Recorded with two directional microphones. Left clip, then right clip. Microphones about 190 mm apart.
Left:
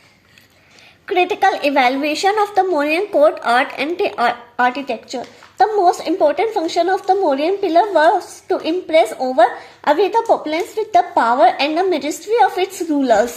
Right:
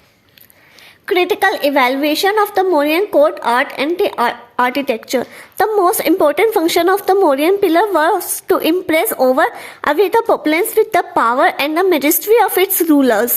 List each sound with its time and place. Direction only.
1.0 s a woman's voice: 25° right (ahead or behind)
4.5 s a woman's voice: 40° right (ahead or behind)